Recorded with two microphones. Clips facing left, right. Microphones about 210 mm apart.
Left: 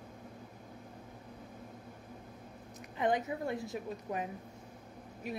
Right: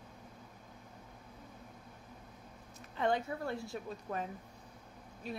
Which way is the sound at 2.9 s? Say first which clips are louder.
Left 1 dB; 15° left (ahead or behind).